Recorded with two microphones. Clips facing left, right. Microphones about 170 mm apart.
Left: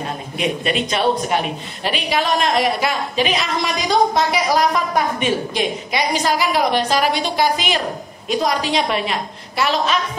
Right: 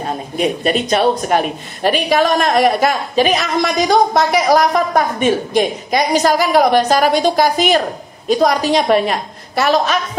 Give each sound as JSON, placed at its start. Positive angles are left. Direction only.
{"t": 0.4, "sound": "a woman's voice", "side_deg": -40}